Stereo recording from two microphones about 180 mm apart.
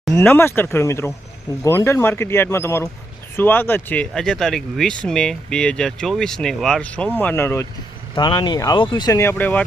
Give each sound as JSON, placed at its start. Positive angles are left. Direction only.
{"t": 0.1, "sound": "speech", "side_deg": 10}
{"t": 8.1, "sound": "speech", "side_deg": 25}